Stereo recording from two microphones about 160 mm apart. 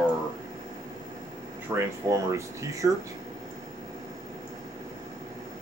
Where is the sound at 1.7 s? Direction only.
20° right (ahead or behind).